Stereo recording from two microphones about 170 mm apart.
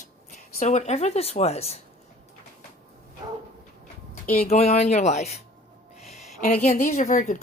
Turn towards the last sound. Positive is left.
turn(degrees=45)  # may be behind; listen again after turning